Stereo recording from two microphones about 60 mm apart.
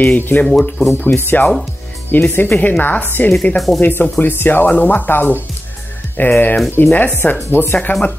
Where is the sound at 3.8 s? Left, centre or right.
Left.